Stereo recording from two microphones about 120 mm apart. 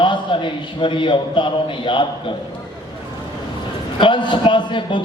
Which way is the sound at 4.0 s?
40° left (ahead or behind).